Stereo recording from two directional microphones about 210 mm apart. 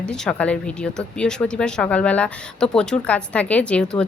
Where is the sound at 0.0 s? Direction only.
5° left (ahead or behind).